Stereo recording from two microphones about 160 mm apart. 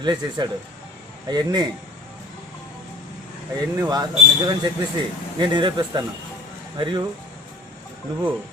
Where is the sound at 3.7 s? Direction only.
25° right (ahead or behind).